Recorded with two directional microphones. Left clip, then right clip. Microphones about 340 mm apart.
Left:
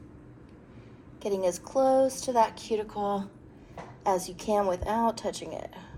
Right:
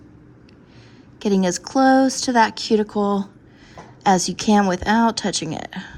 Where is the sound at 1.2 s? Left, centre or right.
Right.